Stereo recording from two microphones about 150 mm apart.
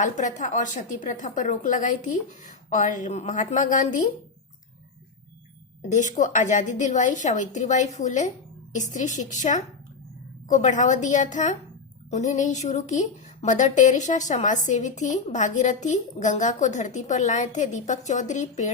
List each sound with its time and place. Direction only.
0.0 s a woman's voice: 55° left (ahead or behind)
5.9 s a woman's voice: 55° left (ahead or behind)